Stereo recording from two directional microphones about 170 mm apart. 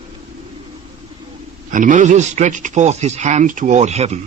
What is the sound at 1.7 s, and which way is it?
A man's voice, 50° right (ahead or behind).